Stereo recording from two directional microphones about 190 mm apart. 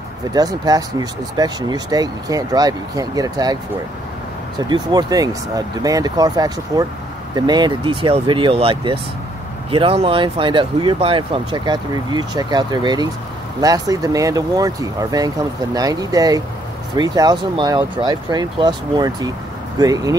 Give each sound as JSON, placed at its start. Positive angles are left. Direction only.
{"t": 0.3, "sound": "speech", "side_deg": -20}
{"t": 4.6, "sound": "speech", "side_deg": -20}